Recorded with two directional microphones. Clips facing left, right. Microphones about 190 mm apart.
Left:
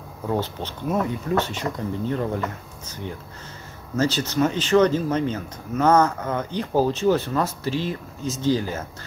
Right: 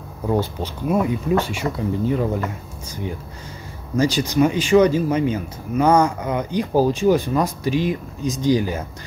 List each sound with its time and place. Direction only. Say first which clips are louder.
0.3 s speech: right 4 dB; 10° right (ahead or behind)
3.9 s speech: right 4 dB; 15° right (ahead or behind)